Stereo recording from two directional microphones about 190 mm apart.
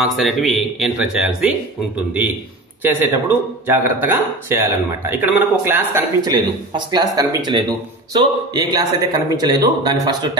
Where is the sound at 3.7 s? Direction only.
10° right (ahead or behind).